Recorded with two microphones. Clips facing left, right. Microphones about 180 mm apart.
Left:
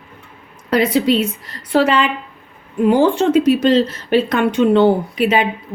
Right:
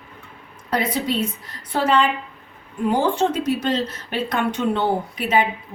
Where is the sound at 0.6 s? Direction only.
80° left.